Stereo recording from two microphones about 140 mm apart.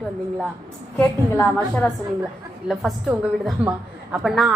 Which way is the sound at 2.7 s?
Centre (ahead or behind).